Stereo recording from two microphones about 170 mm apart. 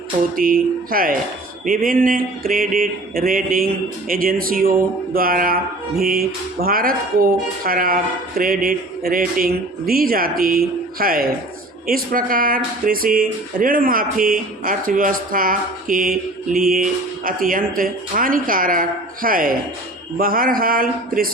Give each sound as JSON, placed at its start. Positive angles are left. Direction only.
{"t": 0.3, "sound": "speech", "side_deg": -55}